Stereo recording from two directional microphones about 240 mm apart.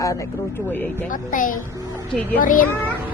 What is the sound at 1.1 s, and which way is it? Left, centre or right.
Speech, left.